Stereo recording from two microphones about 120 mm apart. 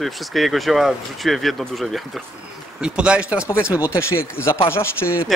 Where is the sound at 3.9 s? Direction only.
20° left (ahead or behind).